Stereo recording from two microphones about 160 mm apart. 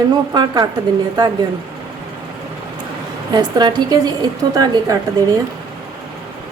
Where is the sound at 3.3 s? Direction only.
25° right (ahead or behind).